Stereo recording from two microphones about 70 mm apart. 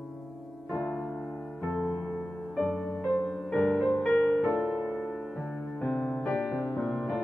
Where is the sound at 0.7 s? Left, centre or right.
Centre.